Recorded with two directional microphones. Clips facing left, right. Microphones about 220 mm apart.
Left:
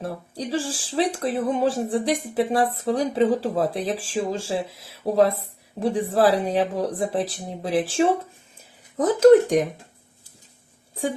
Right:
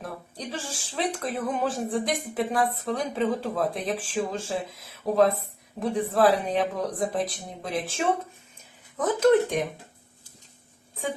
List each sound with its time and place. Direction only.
0.0 s speech: 30° left (ahead or behind)